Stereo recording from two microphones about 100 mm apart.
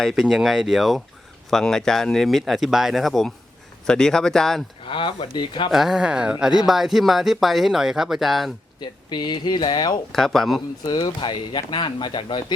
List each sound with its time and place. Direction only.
0.0 s speech: centre (ahead or behind)
4.9 s speech: 55° left (ahead or behind)
5.7 s speech: 5° right (ahead or behind)
8.8 s speech: 45° left (ahead or behind)
10.1 s speech: 5° left (ahead or behind)
10.8 s speech: 45° left (ahead or behind)